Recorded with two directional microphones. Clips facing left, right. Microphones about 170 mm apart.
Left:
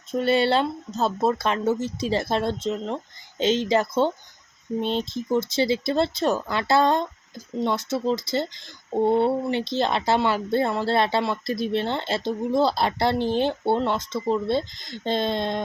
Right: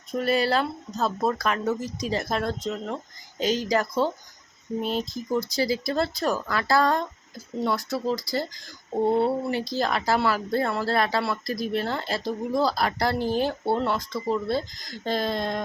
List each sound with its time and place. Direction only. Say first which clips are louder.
0.2 s speech: left 3 dB; 25° left (ahead or behind)